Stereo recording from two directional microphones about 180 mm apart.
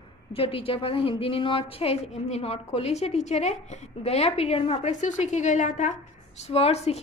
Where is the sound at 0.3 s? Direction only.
30° left (ahead or behind).